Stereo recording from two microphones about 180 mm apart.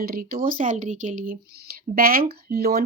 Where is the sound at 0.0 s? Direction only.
55° right (ahead or behind).